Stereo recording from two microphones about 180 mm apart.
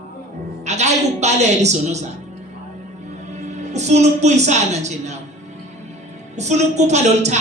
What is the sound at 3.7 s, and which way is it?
A man's voice, 40° right (ahead or behind).